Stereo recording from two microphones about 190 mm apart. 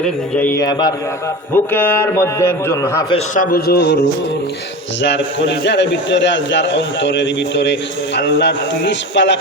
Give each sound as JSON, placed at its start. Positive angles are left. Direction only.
{"t": 0.0, "sound": "a man's voice", "side_deg": 10}
{"t": 0.6, "sound": "a man's voice", "side_deg": 20}
{"t": 1.5, "sound": "a man's voice", "side_deg": 10}
{"t": 3.3, "sound": "a man's voice", "side_deg": 50}
{"t": 5.0, "sound": "a man's voice", "side_deg": 70}